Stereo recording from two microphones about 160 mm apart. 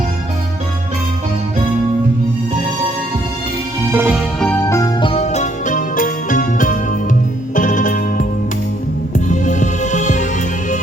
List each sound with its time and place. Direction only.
3.9 s music: 10° right (ahead or behind)
4.5 s music: 15° left (ahead or behind)
4.9 s music: 35° left (ahead or behind)